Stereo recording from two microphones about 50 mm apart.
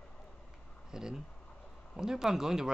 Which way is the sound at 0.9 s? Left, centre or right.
Centre.